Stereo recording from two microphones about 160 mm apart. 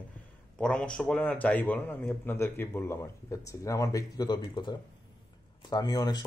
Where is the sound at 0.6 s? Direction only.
5° left (ahead or behind).